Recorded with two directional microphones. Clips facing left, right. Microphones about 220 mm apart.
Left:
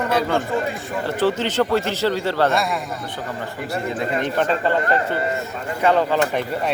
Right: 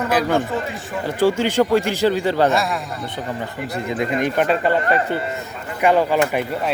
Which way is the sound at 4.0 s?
15° right (ahead or behind).